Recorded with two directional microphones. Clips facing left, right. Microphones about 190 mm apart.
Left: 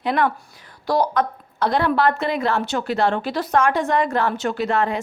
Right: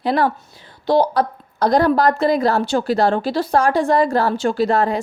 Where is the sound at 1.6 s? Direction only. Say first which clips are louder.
Right 4 dB; 40° right (ahead or behind).